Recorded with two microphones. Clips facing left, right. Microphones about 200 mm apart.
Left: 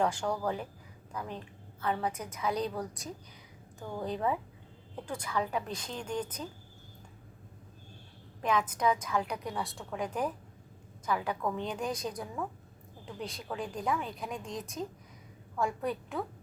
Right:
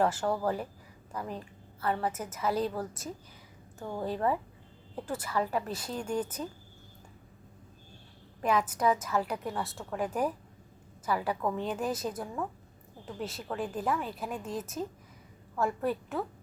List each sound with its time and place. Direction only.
0.0 s a woman's voice: 5° right (ahead or behind)
8.4 s a woman's voice: 5° right (ahead or behind)